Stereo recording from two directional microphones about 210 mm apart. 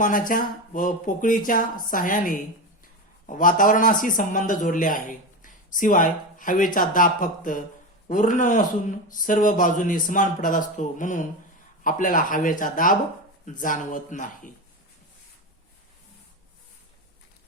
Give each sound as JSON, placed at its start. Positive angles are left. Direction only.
{"t": 0.0, "sound": "a man's voice", "side_deg": 40}